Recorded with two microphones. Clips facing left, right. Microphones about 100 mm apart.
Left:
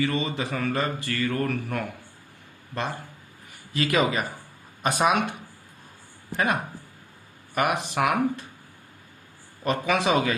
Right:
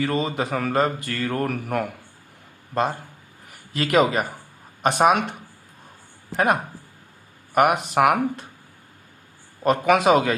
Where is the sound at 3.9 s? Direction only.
45° right (ahead or behind).